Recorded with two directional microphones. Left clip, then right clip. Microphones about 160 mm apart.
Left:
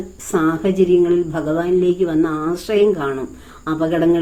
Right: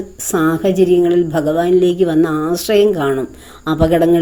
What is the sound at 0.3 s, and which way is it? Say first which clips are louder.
A woman's voice: right 3 dB; 35° right (ahead or behind).